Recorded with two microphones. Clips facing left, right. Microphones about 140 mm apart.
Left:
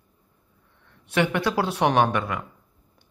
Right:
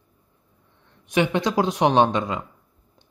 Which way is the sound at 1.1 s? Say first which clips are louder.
Right 2 dB; 15° right (ahead or behind).